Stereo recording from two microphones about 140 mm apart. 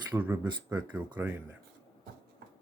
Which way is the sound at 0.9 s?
15° right (ahead or behind).